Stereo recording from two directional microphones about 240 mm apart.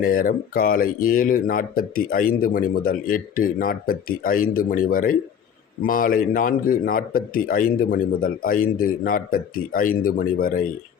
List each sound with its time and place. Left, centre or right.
0.0 s speech: left